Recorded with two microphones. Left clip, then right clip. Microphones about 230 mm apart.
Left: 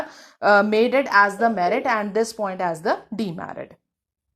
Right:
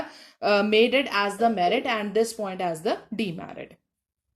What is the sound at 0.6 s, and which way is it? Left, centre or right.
Speech, left.